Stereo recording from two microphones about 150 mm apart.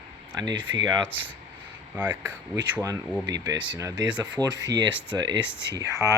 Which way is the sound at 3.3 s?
25° right (ahead or behind).